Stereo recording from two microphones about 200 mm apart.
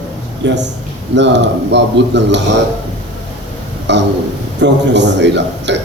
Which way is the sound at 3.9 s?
60° right (ahead or behind).